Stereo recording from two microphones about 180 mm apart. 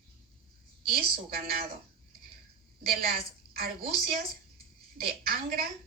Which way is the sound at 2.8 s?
55° right (ahead or behind).